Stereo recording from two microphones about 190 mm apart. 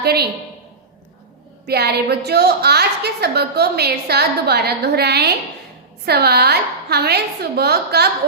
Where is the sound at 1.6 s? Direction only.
60° right (ahead or behind).